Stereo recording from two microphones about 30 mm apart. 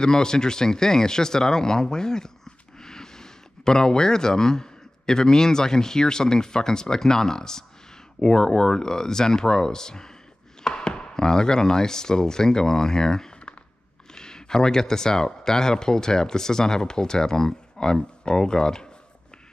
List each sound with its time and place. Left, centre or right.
0.0 s speech: left